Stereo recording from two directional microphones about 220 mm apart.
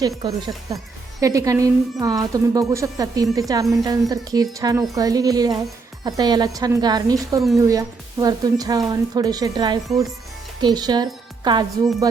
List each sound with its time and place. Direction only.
0.0 s a woman's voice: 20° right (ahead or behind)